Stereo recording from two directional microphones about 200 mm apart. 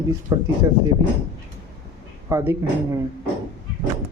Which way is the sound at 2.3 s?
10° right (ahead or behind).